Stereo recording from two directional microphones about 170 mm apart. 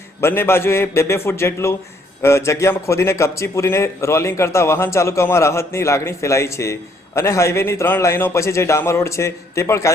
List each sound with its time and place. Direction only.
0.2 s a man's voice: 15° left (ahead or behind)